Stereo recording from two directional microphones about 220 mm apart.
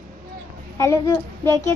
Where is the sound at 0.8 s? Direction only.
15° left (ahead or behind).